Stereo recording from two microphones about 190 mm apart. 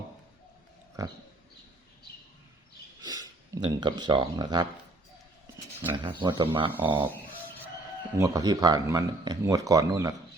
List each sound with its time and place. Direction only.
1.0 s speech: 20° right (ahead or behind)
3.0 s speech: 20° right (ahead or behind)
6.1 s speech: 25° right (ahead or behind)
8.1 s speech: 20° right (ahead or behind)